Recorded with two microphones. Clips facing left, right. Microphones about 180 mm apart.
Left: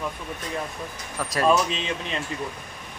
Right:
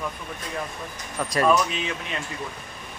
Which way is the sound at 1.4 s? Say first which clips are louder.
Left 1 dB; 30° left (ahead or behind).